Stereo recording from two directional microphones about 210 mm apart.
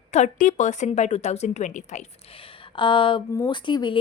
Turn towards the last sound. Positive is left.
turn(degrees=20)  # may be behind; listen again after turning